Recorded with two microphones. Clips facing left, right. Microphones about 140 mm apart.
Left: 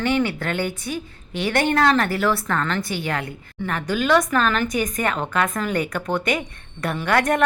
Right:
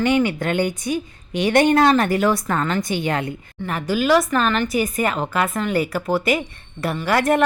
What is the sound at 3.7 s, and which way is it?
Speech, 5° right (ahead or behind).